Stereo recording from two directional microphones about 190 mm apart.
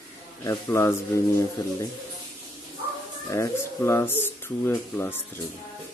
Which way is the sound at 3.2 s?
15° left (ahead or behind).